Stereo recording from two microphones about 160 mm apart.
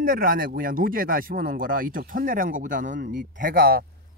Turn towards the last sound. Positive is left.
turn(degrees=-70)  # may be behind; listen again after turning